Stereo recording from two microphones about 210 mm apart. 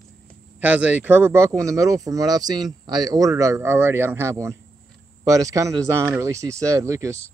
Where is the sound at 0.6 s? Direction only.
5° right (ahead or behind).